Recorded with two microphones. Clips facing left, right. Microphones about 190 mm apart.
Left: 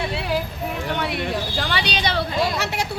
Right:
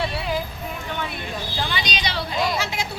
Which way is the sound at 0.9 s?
75° left (ahead or behind).